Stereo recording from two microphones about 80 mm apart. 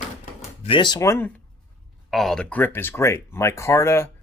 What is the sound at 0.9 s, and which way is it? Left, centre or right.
Speech, left.